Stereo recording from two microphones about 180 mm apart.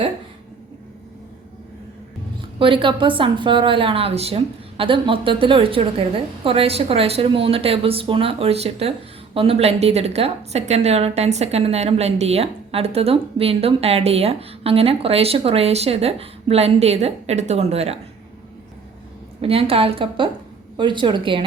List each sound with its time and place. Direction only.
2.6 s a woman's voice: 30° right (ahead or behind)
19.4 s a woman's voice: 30° right (ahead or behind)